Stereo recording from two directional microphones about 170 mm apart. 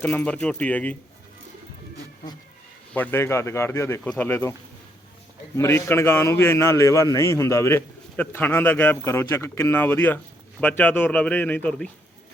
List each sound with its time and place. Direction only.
0.0 s a man's voice: 10° left (ahead or behind)
2.9 s a man's voice: 10° left (ahead or behind)
5.5 s a man's voice: 15° left (ahead or behind)